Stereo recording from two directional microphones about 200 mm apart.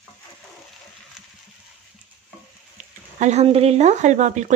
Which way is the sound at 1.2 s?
Centre (ahead or behind).